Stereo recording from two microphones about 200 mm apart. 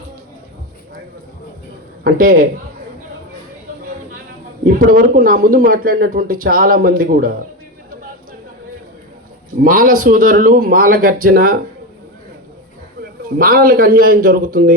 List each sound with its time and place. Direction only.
2.0 s a man's voice: 45° right (ahead or behind)
4.6 s a man's voice: 45° right (ahead or behind)
9.6 s a man's voice: 45° right (ahead or behind)
13.0 s a man's voice: 45° right (ahead or behind)